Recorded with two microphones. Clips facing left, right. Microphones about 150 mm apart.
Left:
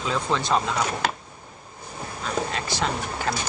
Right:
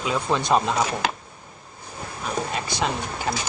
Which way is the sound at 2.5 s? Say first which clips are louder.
Right 1 dB; 15° right (ahead or behind).